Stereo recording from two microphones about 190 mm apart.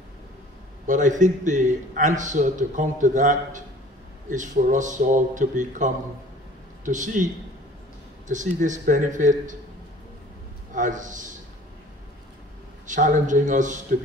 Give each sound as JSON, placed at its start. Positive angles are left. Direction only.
{"t": 0.8, "sound": "a man's voice", "side_deg": -40}
{"t": 8.3, "sound": "a man's voice", "side_deg": -40}
{"t": 10.7, "sound": "a man's voice", "side_deg": -40}
{"t": 12.8, "sound": "a man's voice", "side_deg": -40}